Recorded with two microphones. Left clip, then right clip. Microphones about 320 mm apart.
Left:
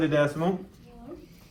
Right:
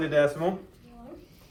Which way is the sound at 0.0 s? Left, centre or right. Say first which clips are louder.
Right 1 dB; centre.